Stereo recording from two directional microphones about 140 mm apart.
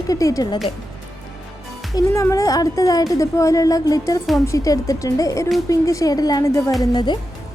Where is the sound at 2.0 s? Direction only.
25° left (ahead or behind).